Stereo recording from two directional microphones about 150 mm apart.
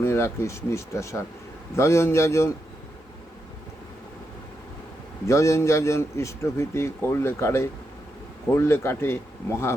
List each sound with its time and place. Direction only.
0.0 s a man's voice: 20° left (ahead or behind)
5.2 s a man's voice: 20° left (ahead or behind)